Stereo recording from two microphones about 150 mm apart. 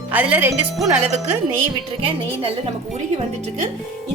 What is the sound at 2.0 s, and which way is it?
Speech, 40° right (ahead or behind).